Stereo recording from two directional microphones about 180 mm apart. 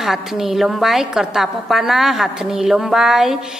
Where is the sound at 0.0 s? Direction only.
Centre (ahead or behind).